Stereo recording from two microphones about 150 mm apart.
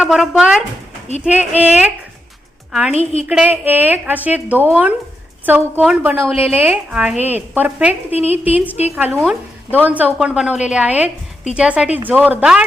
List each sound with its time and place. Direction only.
0.0 s a woman's voice: 5° right (ahead or behind)
3.0 s a woman's voice: 45° left (ahead or behind)
3.2 s a woman's voice: 10° right (ahead or behind)